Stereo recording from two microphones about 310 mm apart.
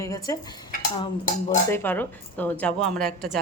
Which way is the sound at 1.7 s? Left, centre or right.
Centre.